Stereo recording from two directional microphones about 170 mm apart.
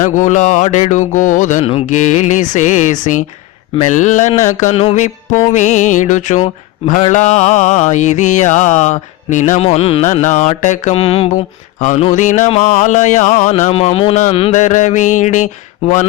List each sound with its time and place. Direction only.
0.0 s mantra: 50° left (ahead or behind)